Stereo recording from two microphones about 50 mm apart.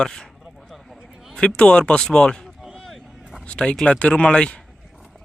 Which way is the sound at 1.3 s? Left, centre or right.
Centre.